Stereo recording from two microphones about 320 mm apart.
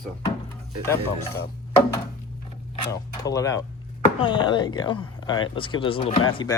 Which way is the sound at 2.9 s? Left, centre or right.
Centre.